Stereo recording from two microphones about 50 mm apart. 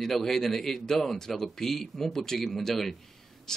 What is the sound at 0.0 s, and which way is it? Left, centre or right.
Speech, centre.